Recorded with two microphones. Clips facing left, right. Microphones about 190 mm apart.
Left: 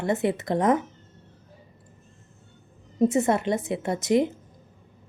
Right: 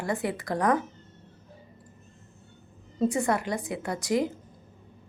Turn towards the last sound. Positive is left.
turn(degrees=20)  # may be behind; listen again after turning